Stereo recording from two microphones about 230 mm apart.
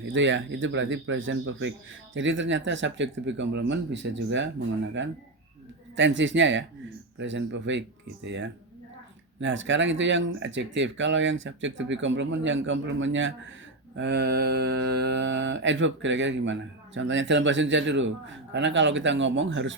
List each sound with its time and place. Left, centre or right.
0.0 s speech: right
2.1 s mantra: right
9.4 s speech: right
13.9 s mantra: right